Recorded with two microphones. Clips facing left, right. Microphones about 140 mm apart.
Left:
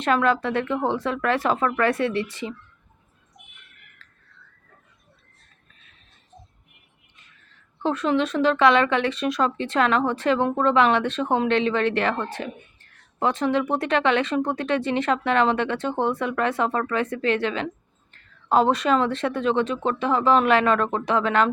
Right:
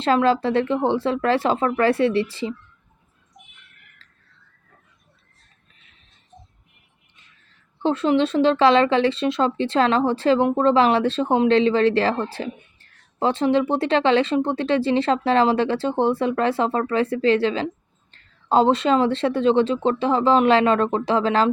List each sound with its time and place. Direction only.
0.0 s a woman's voice: 30° right (ahead or behind)
4.0 s a sound: 30° right (ahead or behind)
7.8 s a woman's voice: 30° right (ahead or behind)